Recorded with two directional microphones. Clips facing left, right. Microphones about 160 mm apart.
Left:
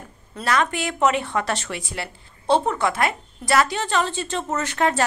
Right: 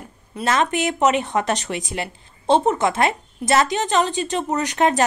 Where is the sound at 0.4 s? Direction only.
20° right (ahead or behind).